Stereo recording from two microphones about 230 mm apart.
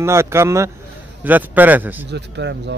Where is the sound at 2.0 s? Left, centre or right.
Right.